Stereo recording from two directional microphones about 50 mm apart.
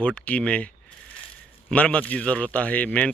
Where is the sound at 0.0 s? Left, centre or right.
Left.